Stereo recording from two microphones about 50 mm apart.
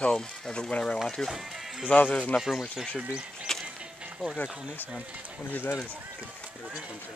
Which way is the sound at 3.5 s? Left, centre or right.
Centre.